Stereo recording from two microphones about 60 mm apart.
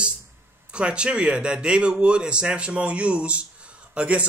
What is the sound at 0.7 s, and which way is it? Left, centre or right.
A man's voice, centre.